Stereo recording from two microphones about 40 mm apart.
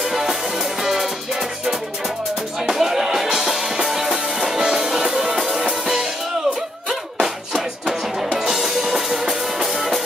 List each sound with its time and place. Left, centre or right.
0.0 s music: centre
2.6 s music: centre